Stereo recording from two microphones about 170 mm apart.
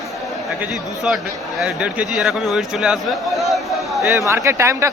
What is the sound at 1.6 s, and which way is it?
A man's voice, 5° right (ahead or behind).